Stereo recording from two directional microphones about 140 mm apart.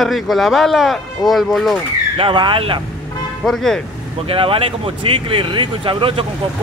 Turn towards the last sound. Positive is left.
turn(degrees=-40)  # may be behind; listen again after turning